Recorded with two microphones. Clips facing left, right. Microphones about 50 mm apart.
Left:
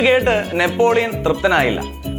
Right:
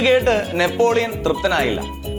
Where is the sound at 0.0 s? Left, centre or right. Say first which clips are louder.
Left 1 dB; centre.